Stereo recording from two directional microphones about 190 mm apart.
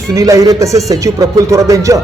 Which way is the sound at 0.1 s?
15° right (ahead or behind).